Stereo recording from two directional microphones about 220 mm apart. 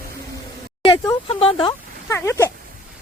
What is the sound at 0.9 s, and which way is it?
Speech, 25° left (ahead or behind).